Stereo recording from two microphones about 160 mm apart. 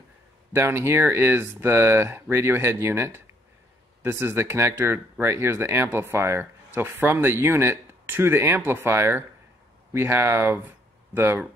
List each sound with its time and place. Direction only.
0.6 s speech: 15° right (ahead or behind)